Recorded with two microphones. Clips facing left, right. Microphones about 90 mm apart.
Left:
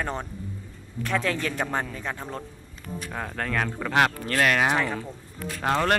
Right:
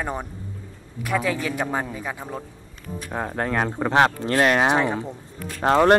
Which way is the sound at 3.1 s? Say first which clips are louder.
Right 5 dB; 20° right (ahead or behind).